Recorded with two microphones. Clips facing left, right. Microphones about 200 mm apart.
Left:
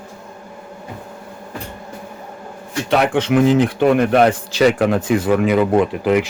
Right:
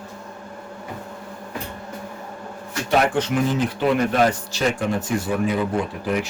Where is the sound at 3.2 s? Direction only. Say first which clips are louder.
Left 7 dB; 80° left.